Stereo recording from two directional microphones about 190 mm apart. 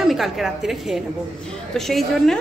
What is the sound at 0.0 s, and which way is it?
A woman's voice, centre (ahead or behind).